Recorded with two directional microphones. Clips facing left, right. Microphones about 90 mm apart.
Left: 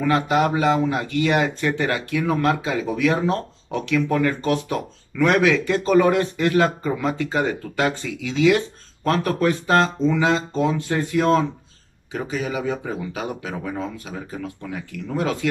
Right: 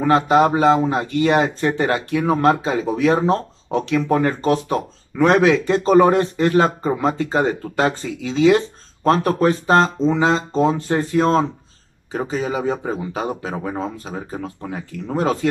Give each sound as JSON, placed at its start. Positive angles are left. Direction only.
{"t": 0.0, "sound": "speech", "side_deg": -30}